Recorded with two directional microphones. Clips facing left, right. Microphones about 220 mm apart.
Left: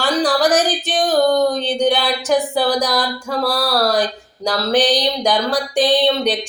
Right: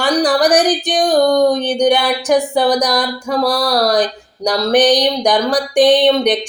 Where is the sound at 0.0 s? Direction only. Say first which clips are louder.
Right 3 dB; 15° right (ahead or behind).